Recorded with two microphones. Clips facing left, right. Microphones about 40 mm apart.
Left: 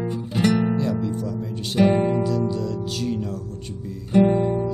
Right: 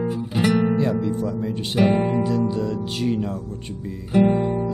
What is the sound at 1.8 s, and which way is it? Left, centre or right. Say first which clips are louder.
Music: left 1 dB; centre.